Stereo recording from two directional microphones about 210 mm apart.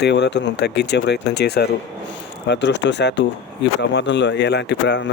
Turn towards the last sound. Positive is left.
turn(degrees=55)  # may be behind; listen again after turning